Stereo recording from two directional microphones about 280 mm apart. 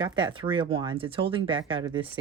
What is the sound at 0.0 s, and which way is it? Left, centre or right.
Speech, centre.